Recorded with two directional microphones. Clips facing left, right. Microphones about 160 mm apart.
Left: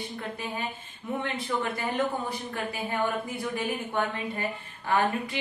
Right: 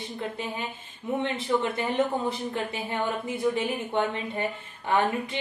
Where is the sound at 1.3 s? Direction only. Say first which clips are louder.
Right 4 dB; 25° right (ahead or behind).